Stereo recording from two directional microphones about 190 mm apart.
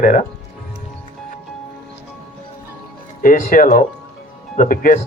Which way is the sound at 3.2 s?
45° left (ahead or behind).